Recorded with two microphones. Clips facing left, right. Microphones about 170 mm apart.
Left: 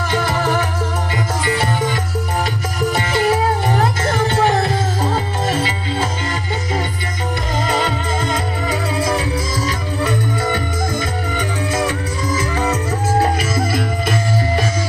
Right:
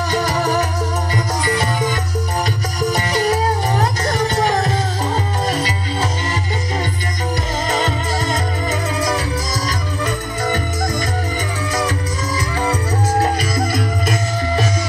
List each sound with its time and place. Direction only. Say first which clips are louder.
0.1 s music: left 1 dB; 40° right (ahead or behind)
2.9 s music: left 1 dB; 40° right (ahead or behind)
5.5 s music: left 1 dB; 40° right (ahead or behind)
7.8 s music: even; 45° right (ahead or behind)